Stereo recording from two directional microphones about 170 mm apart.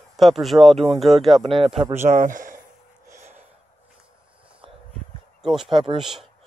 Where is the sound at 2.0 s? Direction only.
50° right (ahead or behind).